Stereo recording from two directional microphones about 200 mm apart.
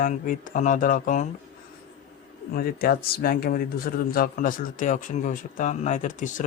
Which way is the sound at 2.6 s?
50° left (ahead or behind).